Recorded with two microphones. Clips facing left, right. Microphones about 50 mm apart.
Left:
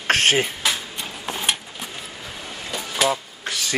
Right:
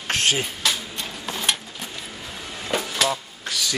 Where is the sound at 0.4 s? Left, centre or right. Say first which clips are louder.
Left 2 dB; centre.